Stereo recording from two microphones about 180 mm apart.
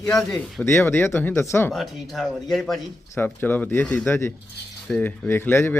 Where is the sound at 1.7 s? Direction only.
Centre (ahead or behind).